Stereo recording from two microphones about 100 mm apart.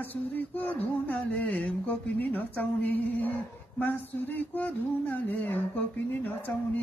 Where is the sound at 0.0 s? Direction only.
20° left (ahead or behind).